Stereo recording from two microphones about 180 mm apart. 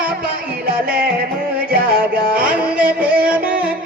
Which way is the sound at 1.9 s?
55° right (ahead or behind).